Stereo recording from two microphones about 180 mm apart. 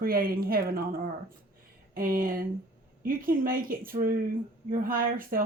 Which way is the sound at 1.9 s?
50° right (ahead or behind).